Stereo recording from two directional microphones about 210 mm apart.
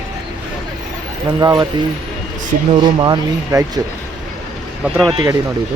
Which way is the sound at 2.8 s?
20° right (ahead or behind).